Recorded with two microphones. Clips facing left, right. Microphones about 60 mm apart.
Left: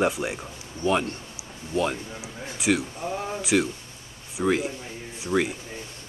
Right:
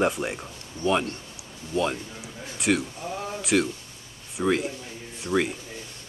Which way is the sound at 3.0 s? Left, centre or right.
Left.